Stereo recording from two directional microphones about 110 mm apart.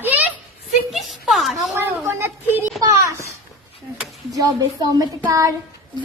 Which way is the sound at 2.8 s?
30° right (ahead or behind).